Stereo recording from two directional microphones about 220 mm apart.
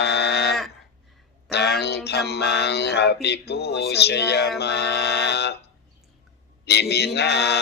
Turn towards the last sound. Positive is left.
turn(degrees=50)  # may be behind; listen again after turning